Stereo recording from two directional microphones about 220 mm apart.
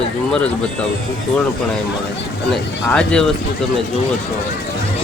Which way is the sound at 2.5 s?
5° left (ahead or behind).